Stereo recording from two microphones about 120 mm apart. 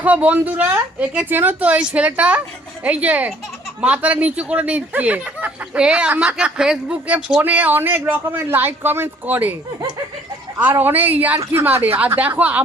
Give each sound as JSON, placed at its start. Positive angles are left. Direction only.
{"t": 0.0, "sound": "speech", "side_deg": -15}
{"t": 10.6, "sound": "speech", "side_deg": -15}